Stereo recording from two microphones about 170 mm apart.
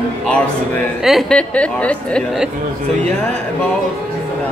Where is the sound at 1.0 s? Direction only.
Centre (ahead or behind).